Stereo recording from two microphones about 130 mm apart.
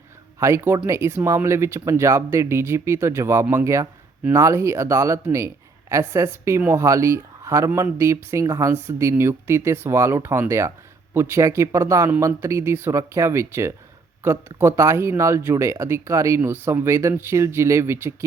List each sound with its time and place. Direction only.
0.3 s speech: 20° right (ahead or behind)